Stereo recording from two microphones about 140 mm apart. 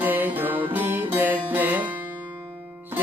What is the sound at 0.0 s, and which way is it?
Music, 15° right (ahead or behind).